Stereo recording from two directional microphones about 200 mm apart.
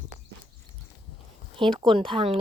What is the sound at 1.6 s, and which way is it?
Speech, 25° right (ahead or behind).